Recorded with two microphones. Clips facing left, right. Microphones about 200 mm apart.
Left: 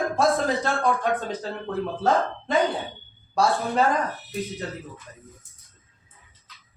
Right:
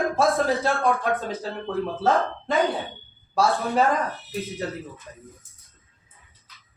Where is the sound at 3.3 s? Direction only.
Centre (ahead or behind).